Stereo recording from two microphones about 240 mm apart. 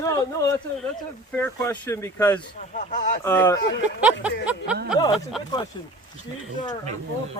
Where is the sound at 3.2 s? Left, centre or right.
Centre.